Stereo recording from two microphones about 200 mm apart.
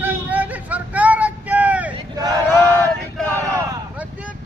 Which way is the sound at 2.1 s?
20° right (ahead or behind).